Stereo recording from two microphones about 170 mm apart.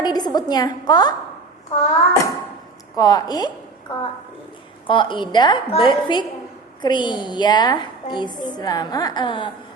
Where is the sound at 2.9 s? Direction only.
25° left (ahead or behind).